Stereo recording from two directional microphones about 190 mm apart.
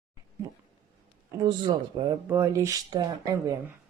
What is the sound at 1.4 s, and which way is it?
Speech, 20° right (ahead or behind).